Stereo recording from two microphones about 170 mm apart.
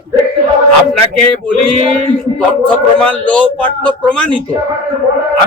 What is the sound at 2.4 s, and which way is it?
A man's voice, 5° left (ahead or behind).